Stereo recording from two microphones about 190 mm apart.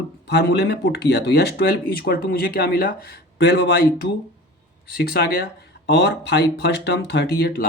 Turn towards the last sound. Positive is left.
turn(degrees=55)  # may be behind; listen again after turning